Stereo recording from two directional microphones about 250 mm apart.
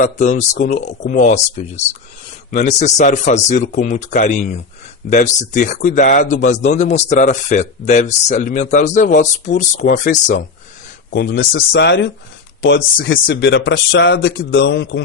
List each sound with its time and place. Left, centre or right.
0.0 s a man's voice: left
11.1 s speech: left